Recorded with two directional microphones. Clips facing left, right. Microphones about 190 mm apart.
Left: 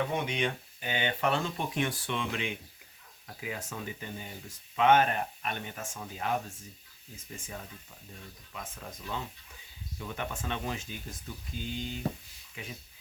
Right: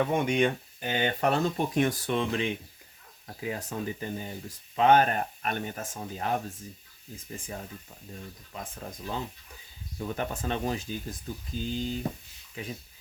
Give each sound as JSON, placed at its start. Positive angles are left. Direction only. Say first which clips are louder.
{"t": 0.1, "sound": "speech", "louder": "right 6 dB", "side_deg": -50}
{"t": 7.3, "sound": "speech", "louder": "right 4 dB", "side_deg": -35}